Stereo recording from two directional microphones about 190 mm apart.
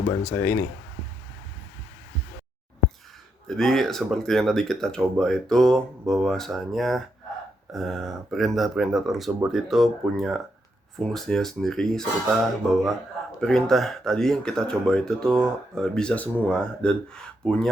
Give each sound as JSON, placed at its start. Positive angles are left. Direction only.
{"t": 0.2, "sound": "speech", "side_deg": 10}
{"t": 3.4, "sound": "speech", "side_deg": 0}